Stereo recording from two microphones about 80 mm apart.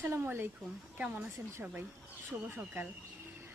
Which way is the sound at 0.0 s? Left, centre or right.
Right.